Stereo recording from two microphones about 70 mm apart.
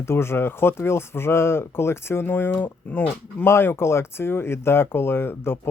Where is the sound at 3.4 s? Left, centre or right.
Left.